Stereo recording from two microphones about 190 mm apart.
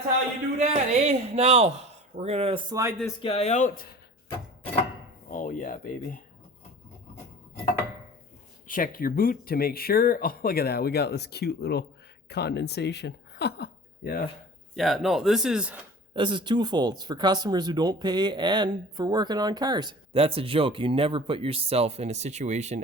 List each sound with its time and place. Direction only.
0.6 s speech: 35° right (ahead or behind)
3.2 s speech: 30° left (ahead or behind)
5.3 s speech: 45° left (ahead or behind)
8.6 s a woman's voice: 45° left (ahead or behind)
14.8 s speech: centre (ahead or behind)
16.1 s speech: 25° right (ahead or behind)